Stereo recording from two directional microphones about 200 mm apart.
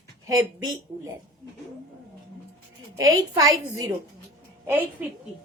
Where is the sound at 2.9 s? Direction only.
20° right (ahead or behind).